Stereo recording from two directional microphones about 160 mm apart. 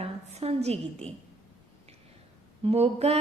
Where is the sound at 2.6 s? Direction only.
40° right (ahead or behind).